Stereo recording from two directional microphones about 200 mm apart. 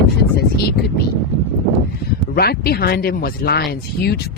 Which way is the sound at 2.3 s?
50° left (ahead or behind).